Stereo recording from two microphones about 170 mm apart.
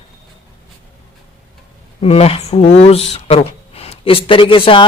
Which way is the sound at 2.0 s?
35° left (ahead or behind).